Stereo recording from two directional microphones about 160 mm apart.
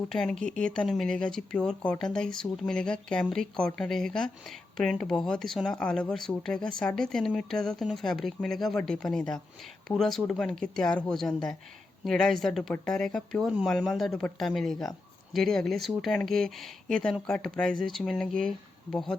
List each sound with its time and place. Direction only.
0.1 s speech: 5° left (ahead or behind)